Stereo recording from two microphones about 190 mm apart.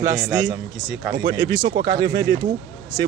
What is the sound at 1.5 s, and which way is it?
Speech, 20° right (ahead or behind).